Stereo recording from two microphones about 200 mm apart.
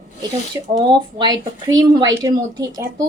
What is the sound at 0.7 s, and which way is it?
Speech, 20° right (ahead or behind).